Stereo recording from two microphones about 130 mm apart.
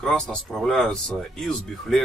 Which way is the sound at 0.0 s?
5° left (ahead or behind).